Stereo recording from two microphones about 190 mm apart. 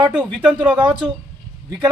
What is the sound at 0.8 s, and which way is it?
Speech, 25° right (ahead or behind).